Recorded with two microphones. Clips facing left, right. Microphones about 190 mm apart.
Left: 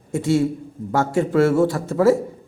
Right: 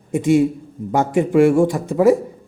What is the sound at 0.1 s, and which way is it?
A man's voice, 15° right (ahead or behind).